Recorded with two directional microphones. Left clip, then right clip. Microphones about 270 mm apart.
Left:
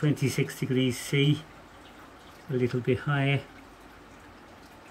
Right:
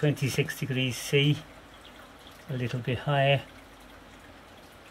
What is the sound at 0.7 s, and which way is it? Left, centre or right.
Speech, right.